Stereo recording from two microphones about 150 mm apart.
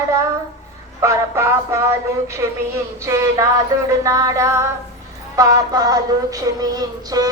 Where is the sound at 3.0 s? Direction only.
20° right (ahead or behind).